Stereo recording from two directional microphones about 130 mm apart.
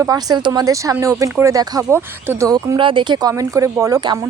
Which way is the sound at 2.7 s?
40° right (ahead or behind).